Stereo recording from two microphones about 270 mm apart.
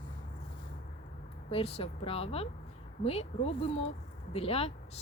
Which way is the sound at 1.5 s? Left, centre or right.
Left.